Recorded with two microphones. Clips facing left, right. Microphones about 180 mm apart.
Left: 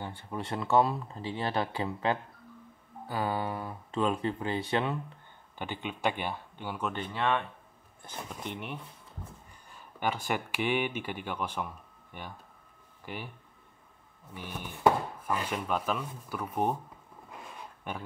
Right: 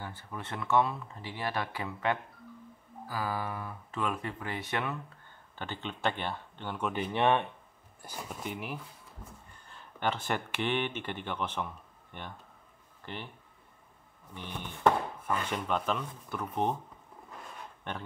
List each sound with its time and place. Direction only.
0.0 s speech: 30° left (ahead or behind)
5.6 s chopping: 10° left (ahead or behind)
7.1 s speech: 30° right (ahead or behind)
8.0 s speech: 10° right (ahead or behind)
9.5 s speech: 10° left (ahead or behind)
14.3 s chopping: 10° left (ahead or behind)
17.3 s a sound: 10° left (ahead or behind)